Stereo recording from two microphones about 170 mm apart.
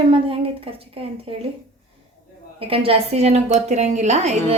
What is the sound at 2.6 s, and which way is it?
A woman's voice, 35° right (ahead or behind).